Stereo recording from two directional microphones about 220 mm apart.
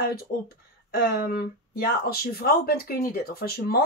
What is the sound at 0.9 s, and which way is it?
Speech, 45° left (ahead or behind).